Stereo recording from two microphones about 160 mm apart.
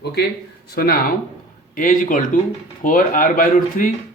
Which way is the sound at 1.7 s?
60° left (ahead or behind).